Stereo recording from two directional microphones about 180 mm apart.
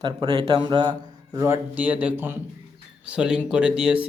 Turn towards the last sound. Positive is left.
turn(degrees=-5)  # may be behind; listen again after turning